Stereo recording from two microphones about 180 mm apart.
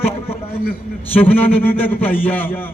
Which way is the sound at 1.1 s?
10° left (ahead or behind).